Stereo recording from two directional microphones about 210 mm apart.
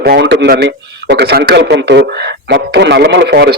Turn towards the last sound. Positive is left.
turn(degrees=-50)  # may be behind; listen again after turning